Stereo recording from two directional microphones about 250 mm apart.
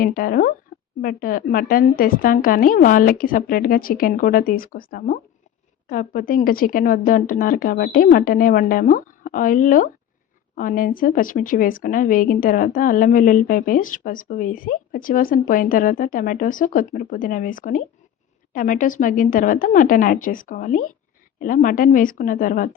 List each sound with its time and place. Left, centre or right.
0.0 s speech: left